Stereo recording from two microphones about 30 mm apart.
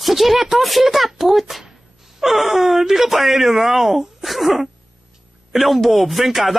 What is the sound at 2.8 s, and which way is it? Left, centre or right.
Speech, centre.